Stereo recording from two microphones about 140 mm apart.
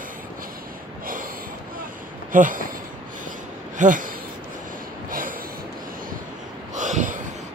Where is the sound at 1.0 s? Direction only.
90° right.